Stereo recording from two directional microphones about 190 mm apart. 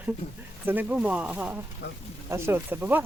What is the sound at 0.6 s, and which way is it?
Speech, 10° right (ahead or behind).